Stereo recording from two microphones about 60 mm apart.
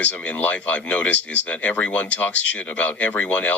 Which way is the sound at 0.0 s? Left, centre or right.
Left.